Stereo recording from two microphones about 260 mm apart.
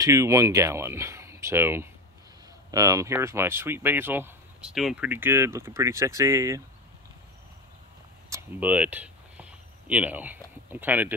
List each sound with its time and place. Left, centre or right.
0.0 s speech: centre
8.3 s speech: centre